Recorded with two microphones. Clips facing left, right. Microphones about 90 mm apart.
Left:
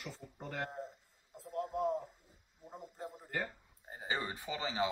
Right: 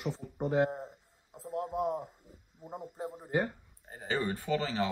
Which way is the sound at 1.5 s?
20° right (ahead or behind).